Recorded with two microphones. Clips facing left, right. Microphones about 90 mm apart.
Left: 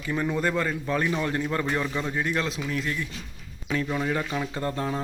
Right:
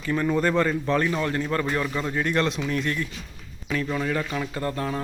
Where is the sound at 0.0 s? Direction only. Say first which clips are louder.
Right 3 dB; 10° left (ahead or behind).